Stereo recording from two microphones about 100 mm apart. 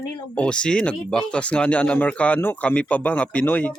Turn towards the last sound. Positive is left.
turn(degrees=15)  # may be behind; listen again after turning